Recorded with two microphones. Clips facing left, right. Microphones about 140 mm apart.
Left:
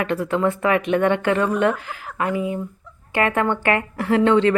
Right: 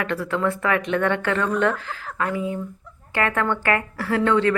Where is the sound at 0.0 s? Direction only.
20° left (ahead or behind).